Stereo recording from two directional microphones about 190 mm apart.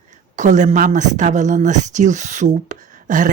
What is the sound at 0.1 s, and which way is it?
Speech, 40° right (ahead or behind).